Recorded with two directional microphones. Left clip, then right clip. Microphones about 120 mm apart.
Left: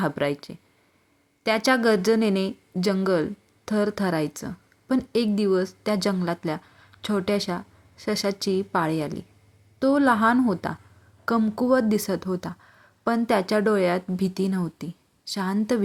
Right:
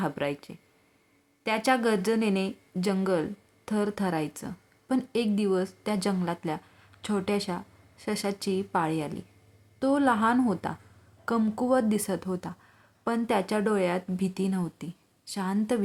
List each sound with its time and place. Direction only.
0.0 s a woman's voice: 30° left (ahead or behind)